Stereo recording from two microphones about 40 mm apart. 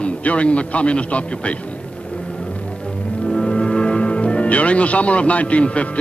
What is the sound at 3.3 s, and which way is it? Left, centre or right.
Speech, centre.